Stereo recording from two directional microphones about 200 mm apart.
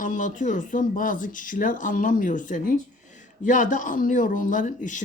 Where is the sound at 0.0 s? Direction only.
40° left (ahead or behind).